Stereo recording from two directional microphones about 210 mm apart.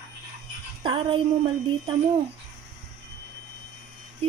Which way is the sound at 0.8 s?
25° right (ahead or behind).